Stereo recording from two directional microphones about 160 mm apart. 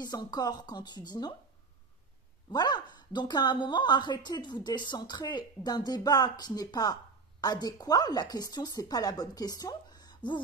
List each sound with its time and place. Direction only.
0.0 s a woman's voice: 25° left (ahead or behind)
2.5 s a woman's voice: 25° left (ahead or behind)